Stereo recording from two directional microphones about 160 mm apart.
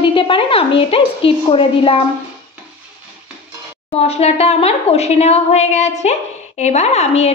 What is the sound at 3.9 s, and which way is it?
A woman's voice, 40° left (ahead or behind).